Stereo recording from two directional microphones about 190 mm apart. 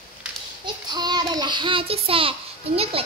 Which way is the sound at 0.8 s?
20° right (ahead or behind).